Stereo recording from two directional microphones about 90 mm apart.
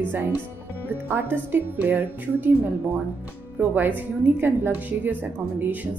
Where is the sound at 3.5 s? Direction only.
20° right (ahead or behind).